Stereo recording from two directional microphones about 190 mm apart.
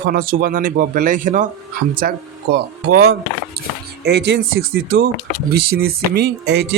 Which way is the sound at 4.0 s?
60° right (ahead or behind).